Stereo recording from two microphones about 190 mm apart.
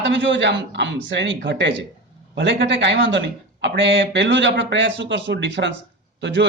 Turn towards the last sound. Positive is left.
turn(degrees=-65)  # may be behind; listen again after turning